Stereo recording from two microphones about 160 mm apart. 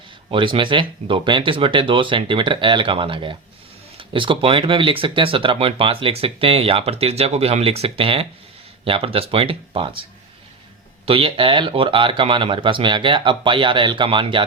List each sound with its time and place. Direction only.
0.3 s speech: 30° right (ahead or behind)
11.0 s speech: 35° right (ahead or behind)